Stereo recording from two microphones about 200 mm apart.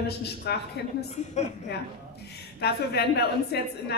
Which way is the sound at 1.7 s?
55° left (ahead or behind).